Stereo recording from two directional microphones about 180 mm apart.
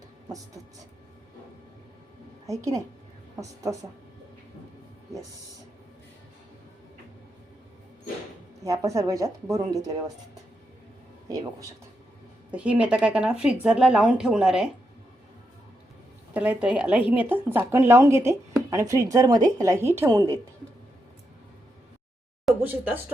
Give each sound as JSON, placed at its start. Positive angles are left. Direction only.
{"t": 0.3, "sound": "speech", "side_deg": -20}
{"t": 3.4, "sound": "speech", "side_deg": -20}
{"t": 8.6, "sound": "speech", "side_deg": -15}
{"t": 11.3, "sound": "speech", "side_deg": -20}
{"t": 12.5, "sound": "speech", "side_deg": -5}
{"t": 16.3, "sound": "speech", "side_deg": -10}
{"t": 22.6, "sound": "speech", "side_deg": -10}